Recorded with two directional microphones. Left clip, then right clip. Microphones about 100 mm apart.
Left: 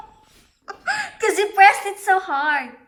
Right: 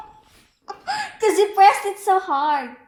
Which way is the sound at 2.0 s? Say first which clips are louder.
Even; 20° right (ahead or behind).